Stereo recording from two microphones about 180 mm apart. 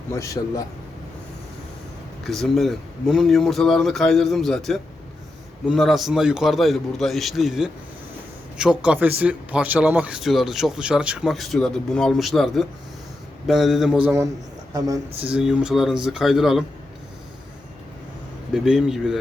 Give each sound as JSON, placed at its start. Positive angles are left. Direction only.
{"t": 0.1, "sound": "a man's voice", "side_deg": 15}
{"t": 2.2, "sound": "speech", "side_deg": 0}
{"t": 14.7, "sound": "speech", "side_deg": -20}
{"t": 15.2, "sound": "speech", "side_deg": -5}
{"t": 18.5, "sound": "speech", "side_deg": -5}